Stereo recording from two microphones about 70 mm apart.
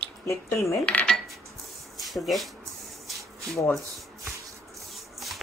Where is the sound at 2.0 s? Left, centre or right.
Centre.